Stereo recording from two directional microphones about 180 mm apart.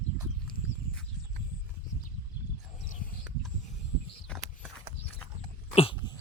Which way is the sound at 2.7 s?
45° left (ahead or behind).